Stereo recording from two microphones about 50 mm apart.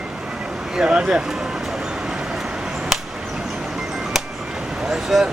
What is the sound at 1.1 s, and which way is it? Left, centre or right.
Vehicle, centre.